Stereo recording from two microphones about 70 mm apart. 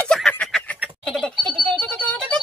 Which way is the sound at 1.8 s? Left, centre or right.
Centre.